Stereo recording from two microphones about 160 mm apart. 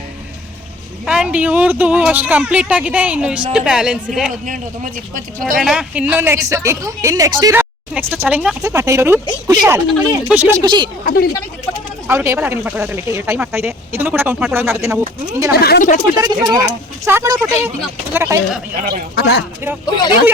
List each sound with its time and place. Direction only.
1.0 s speech: 5° right (ahead or behind)
4.4 s speech: 55° right (ahead or behind)
5.5 s speech: 5° right (ahead or behind); by 7.5 s 25° right (ahead or behind)
7.5 s speech: 10° right (ahead or behind)
8.6 s speech: 20° right (ahead or behind)
10.6 s speech: 25° right (ahead or behind)
11.0 s speech: 65° left (ahead or behind)
12.0 s speech: 15° right (ahead or behind)
15.5 s speech: 75° left (ahead or behind)
16.2 s speech: 25° right (ahead or behind)
19.1 s speech: 90° left
19.8 s speech: 25° left (ahead or behind)